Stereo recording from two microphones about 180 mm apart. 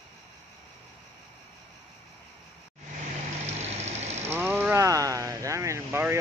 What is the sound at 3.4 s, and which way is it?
Vehicle, 35° right (ahead or behind).